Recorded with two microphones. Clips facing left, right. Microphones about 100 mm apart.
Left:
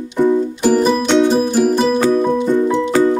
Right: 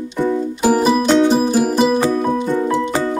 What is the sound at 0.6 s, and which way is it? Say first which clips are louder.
Music: even; 5° right (ahead or behind).